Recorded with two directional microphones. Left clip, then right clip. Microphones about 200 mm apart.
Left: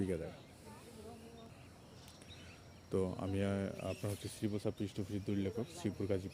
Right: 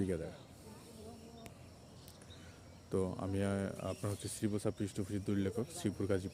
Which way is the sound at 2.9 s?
5° left (ahead or behind).